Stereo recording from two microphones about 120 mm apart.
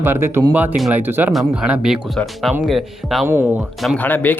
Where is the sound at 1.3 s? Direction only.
5° right (ahead or behind).